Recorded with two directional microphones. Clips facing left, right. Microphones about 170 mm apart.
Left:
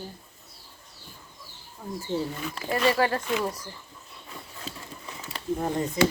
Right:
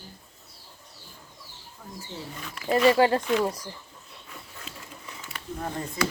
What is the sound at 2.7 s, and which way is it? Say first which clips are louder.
Speech: right 4 dB; 20° right (ahead or behind).